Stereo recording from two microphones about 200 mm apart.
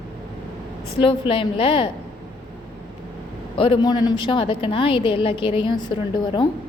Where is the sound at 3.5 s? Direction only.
25° left (ahead or behind).